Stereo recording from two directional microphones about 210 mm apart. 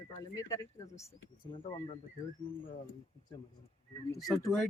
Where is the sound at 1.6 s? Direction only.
25° left (ahead or behind).